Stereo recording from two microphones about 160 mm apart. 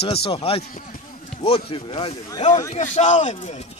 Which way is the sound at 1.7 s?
35° left (ahead or behind).